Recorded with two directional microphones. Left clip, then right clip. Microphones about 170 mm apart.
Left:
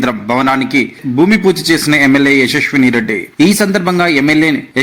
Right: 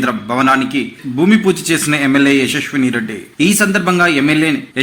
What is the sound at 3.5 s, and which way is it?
A man's voice, 15° left (ahead or behind).